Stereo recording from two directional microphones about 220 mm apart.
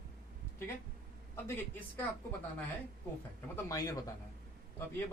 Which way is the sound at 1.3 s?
10° left (ahead or behind).